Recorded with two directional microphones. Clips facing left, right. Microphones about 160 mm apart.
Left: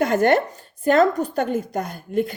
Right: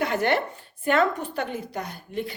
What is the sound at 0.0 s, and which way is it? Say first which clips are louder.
Chopping: left 6 dB; 45° left (ahead or behind).